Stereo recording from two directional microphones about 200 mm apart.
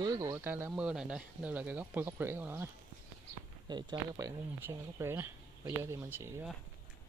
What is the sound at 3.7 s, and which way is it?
Speech, 20° right (ahead or behind).